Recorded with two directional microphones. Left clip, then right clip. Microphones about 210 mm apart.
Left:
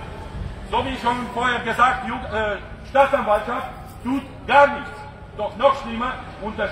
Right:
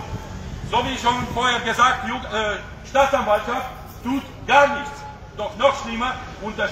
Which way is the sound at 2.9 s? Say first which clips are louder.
Left 1 dB; 10° right (ahead or behind).